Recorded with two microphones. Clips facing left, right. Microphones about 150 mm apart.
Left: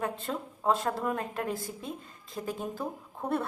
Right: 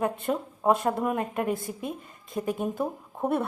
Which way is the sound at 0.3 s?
20° right (ahead or behind).